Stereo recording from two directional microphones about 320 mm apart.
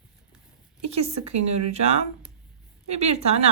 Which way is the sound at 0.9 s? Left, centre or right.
Centre.